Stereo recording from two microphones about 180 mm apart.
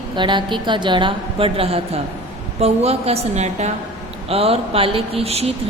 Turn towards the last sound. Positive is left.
turn(degrees=-35)  # may be behind; listen again after turning